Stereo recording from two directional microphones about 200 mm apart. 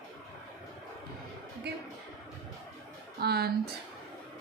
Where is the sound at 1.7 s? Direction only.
55° right (ahead or behind).